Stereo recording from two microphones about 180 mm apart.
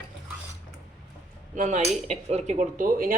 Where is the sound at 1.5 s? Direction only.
45° right (ahead or behind).